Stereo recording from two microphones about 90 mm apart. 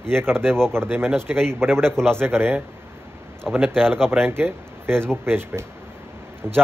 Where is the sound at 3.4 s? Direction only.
10° right (ahead or behind).